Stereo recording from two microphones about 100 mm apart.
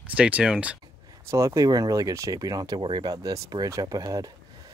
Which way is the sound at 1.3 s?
30° right (ahead or behind).